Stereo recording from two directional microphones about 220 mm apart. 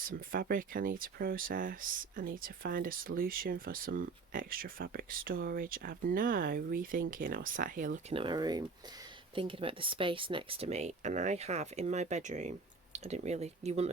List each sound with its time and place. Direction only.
0.3 s speech: 40° right (ahead or behind)
8.1 s speech: 20° right (ahead or behind)